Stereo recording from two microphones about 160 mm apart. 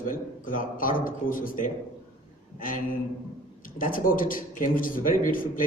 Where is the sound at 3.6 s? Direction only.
60° left (ahead or behind).